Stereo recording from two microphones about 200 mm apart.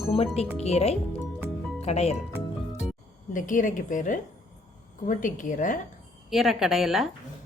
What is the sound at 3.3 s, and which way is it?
Speech, 40° left (ahead or behind).